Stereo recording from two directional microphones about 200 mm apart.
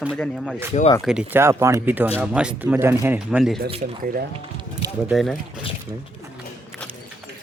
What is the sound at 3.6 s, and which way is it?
Speech, 25° right (ahead or behind).